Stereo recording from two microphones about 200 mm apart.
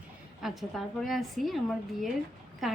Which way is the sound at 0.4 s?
Centre (ahead or behind).